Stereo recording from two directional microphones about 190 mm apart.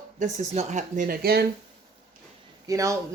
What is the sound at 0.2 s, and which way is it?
Speech, 40° right (ahead or behind).